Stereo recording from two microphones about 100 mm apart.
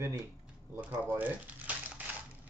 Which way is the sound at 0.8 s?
20° right (ahead or behind).